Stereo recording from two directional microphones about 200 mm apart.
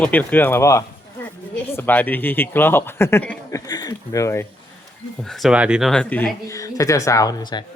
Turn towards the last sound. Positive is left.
turn(degrees=20)  # may be behind; listen again after turning